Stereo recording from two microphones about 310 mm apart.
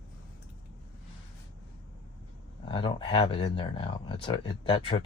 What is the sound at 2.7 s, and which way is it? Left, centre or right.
Speech, centre.